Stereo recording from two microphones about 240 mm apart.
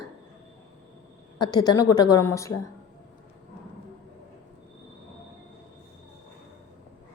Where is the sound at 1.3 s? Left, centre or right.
Centre.